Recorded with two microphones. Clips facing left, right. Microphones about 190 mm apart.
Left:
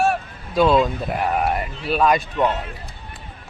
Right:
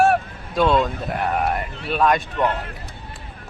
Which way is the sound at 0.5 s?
5° left (ahead or behind).